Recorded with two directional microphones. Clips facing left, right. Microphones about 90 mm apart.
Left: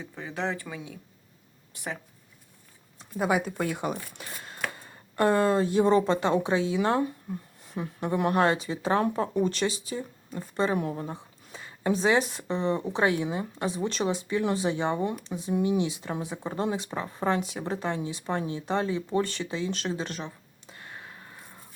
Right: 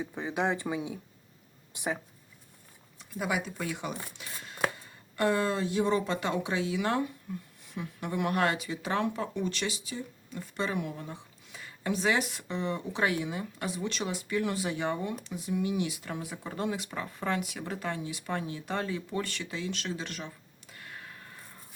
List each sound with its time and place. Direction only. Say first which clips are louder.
0.0 s speech: right 2 dB; 15° right (ahead or behind)
3.0 s speech: left 6 dB; 40° left (ahead or behind)